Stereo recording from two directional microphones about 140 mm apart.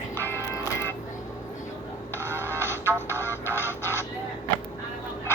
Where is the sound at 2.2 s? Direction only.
15° right (ahead or behind).